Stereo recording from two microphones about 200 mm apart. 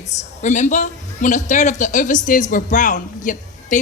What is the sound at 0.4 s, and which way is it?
A man's voice, 35° left (ahead or behind).